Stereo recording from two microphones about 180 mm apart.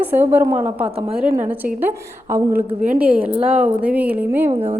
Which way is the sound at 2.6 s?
45° right (ahead or behind).